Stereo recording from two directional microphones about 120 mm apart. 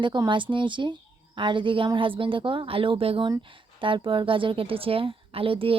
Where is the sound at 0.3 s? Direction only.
45° right (ahead or behind).